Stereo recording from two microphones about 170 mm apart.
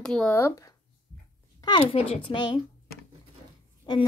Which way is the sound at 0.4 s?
20° left (ahead or behind).